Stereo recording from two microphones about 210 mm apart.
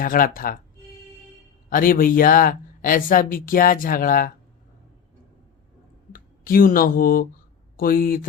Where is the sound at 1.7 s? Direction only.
40° left (ahead or behind).